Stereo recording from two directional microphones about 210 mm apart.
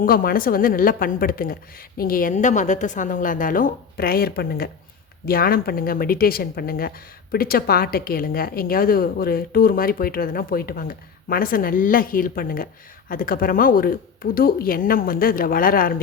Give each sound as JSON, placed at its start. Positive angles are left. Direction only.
{"t": 0.0, "sound": "a woman's voice", "side_deg": 40}